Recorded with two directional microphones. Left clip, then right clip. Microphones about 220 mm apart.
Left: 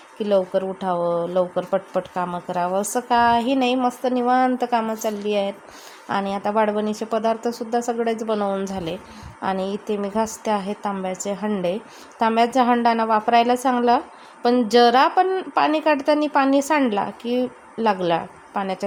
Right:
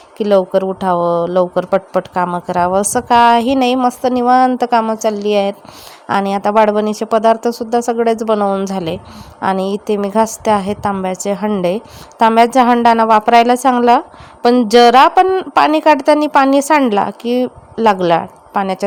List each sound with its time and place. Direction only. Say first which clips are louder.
0.2 s speech: right 8 dB; 40° right (ahead or behind)